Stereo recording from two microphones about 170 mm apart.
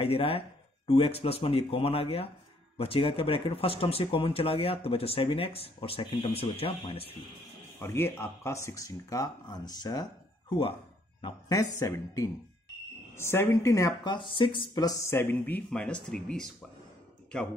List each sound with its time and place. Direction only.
0.0 s speech: 35° left (ahead or behind)
7.8 s speech: 15° left (ahead or behind)
11.1 s speech: 25° left (ahead or behind); by 16.4 s 5° left (ahead or behind)